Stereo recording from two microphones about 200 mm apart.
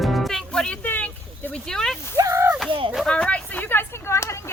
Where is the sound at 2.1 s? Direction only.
15° right (ahead or behind).